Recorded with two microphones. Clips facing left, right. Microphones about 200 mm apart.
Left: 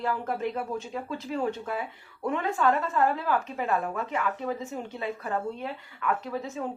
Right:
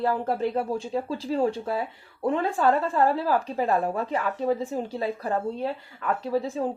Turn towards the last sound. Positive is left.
turn(degrees=-35)  # may be behind; listen again after turning